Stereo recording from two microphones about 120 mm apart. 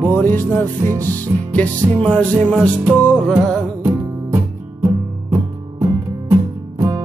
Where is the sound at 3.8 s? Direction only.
20° right (ahead or behind).